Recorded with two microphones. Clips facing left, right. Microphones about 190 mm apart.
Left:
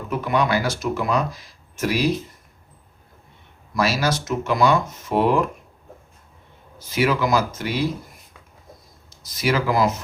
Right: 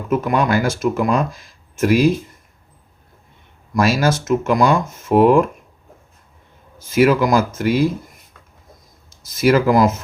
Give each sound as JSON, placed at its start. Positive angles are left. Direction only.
{"t": 0.1, "sound": "speech", "side_deg": -45}
{"t": 3.8, "sound": "speech", "side_deg": -50}
{"t": 6.7, "sound": "speech", "side_deg": -50}
{"t": 9.2, "sound": "speech", "side_deg": -50}